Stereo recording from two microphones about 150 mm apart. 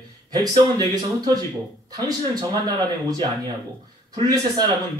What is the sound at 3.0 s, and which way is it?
Speech, 30° right (ahead or behind).